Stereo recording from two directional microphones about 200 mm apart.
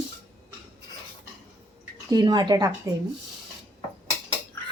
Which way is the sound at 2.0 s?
20° right (ahead or behind).